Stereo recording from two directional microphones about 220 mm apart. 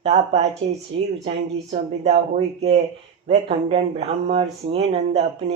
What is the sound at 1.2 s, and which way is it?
Speech, 30° right (ahead or behind).